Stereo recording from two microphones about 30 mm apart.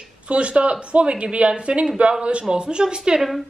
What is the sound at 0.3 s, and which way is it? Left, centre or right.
A woman's voice, right.